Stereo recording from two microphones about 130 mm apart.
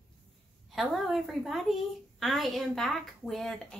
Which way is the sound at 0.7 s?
Centre (ahead or behind).